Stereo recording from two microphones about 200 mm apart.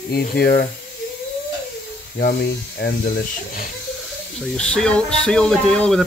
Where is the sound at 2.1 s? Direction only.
50° left (ahead or behind).